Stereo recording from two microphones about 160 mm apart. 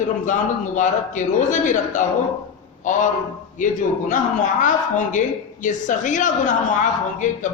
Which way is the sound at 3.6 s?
55° left (ahead or behind).